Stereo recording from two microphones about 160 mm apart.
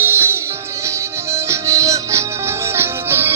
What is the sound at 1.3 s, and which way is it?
Music, 20° right (ahead or behind).